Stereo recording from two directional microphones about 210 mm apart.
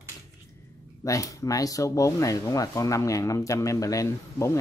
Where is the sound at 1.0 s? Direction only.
15° left (ahead or behind).